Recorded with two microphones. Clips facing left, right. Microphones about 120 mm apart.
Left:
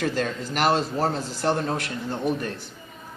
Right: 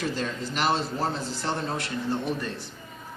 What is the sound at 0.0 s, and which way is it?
A man's voice, 50° left (ahead or behind).